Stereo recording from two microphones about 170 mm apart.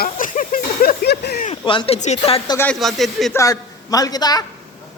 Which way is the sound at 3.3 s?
20° left (ahead or behind).